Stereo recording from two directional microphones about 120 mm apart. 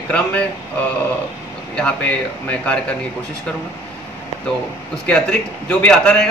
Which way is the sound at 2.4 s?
10° left (ahead or behind).